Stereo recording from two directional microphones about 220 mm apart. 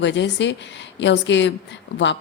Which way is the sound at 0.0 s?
55° left (ahead or behind).